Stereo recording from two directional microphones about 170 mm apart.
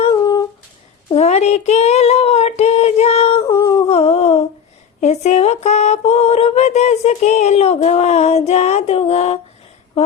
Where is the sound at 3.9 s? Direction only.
35° left (ahead or behind).